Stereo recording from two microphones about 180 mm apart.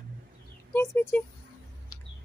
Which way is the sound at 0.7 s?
15° left (ahead or behind).